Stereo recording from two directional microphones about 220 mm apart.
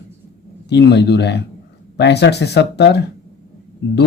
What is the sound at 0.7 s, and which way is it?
Speech, 50° left (ahead or behind).